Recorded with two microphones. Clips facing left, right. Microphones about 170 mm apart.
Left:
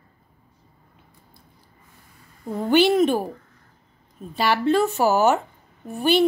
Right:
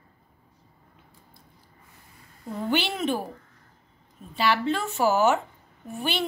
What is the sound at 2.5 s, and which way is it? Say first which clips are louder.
Speech: left 10 dB; 45° left (ahead or behind).